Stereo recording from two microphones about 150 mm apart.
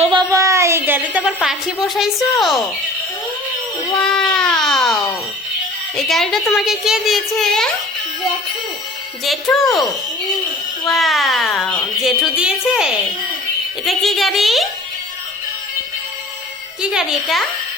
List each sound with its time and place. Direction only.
0.0 s a sound: 35° right (ahead or behind)
0.3 s a woman's voice: 20° right (ahead or behind); by 2.6 s centre (ahead or behind)
4.0 s a woman's voice: 5° left (ahead or behind)
6.0 s a woman's voice: centre (ahead or behind)
9.2 s a woman's voice: centre (ahead or behind)
10.8 s a woman's voice: centre (ahead or behind)
16.8 s a woman's voice: 5° right (ahead or behind)